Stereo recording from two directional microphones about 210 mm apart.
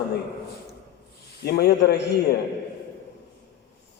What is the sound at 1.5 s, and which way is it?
Speech, 50° left (ahead or behind).